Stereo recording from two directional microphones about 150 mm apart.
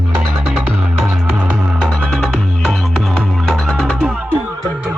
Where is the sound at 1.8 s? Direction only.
Centre (ahead or behind).